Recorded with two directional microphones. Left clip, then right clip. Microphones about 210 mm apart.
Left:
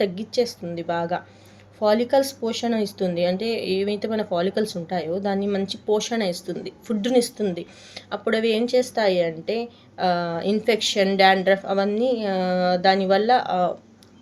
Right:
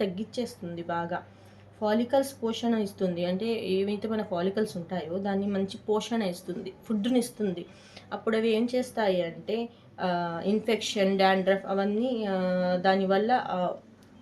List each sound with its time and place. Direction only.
0.0 s speech: 30° left (ahead or behind)